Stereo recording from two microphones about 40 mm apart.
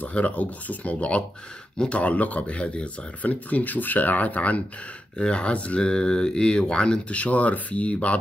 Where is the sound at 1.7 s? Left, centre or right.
Left.